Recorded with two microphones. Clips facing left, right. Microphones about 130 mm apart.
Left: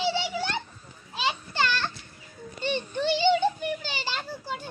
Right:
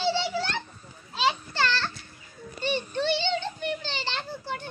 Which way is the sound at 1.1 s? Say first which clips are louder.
Right 2 dB; 15° left (ahead or behind).